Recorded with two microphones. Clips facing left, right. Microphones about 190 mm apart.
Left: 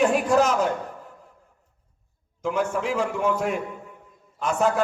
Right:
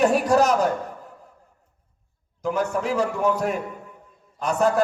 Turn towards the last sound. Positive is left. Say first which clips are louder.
# right 2 dB
turn(degrees=-40)  # may be behind; listen again after turning